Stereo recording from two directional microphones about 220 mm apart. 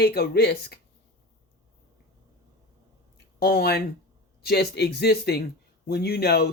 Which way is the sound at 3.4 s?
45° left (ahead or behind).